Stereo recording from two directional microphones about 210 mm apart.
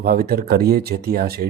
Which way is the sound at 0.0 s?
45° right (ahead or behind).